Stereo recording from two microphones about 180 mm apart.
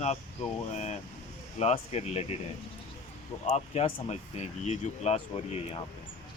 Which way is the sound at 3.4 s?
35° left (ahead or behind).